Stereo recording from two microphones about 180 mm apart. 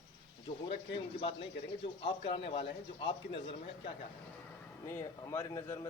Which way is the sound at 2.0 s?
30° left (ahead or behind).